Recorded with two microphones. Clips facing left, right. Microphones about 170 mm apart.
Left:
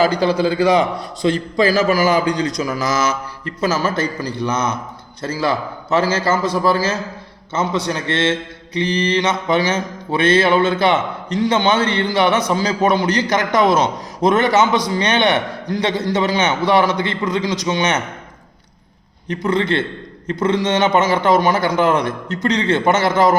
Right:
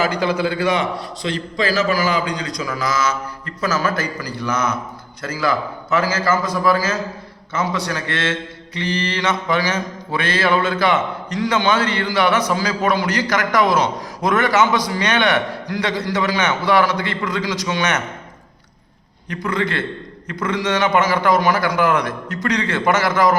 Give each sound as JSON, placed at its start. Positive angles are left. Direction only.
{"t": 0.0, "sound": "a man's voice", "side_deg": 35}
{"t": 2.4, "sound": "speech", "side_deg": 20}
{"t": 19.3, "sound": "speech", "side_deg": 25}